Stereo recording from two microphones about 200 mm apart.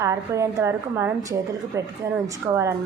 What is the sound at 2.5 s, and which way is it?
Speech, 15° right (ahead or behind).